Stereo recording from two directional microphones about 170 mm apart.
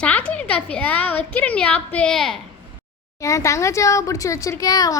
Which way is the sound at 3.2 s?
20° left (ahead or behind).